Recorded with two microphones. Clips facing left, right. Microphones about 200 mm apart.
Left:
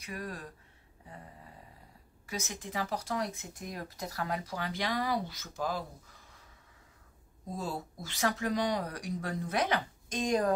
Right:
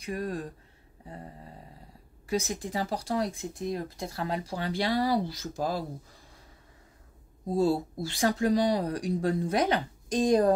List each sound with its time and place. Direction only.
0.0 s speech: 35° right (ahead or behind)
7.4 s speech: 35° right (ahead or behind)